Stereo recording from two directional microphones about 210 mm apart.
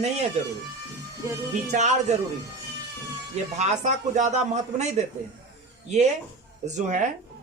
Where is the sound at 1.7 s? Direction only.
35° right (ahead or behind).